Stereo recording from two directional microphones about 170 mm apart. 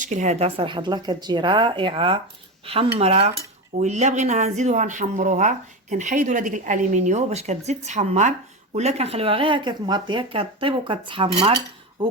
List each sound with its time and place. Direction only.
0.0 s speech: 45° right (ahead or behind)
2.6 s cutlery: 35° right (ahead or behind)
8.7 s speech: 40° right (ahead or behind)
12.0 s a sound: 30° right (ahead or behind)